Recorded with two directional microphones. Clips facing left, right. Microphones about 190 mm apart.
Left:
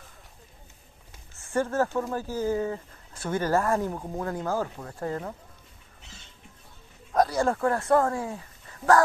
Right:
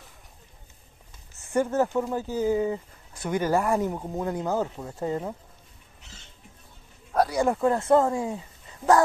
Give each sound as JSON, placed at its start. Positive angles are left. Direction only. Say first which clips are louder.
{"t": 1.4, "sound": "speech", "louder": "right 2 dB", "side_deg": -20}
{"t": 7.1, "sound": "speech", "louder": "even", "side_deg": -10}